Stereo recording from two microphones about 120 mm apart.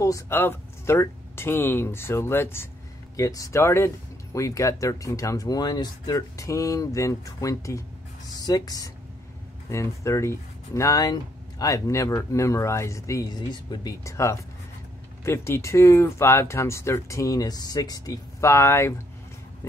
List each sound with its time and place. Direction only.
0.0 s speech: 20° left (ahead or behind)
14.0 s speech: 25° left (ahead or behind)
19.6 s a sound: 20° left (ahead or behind)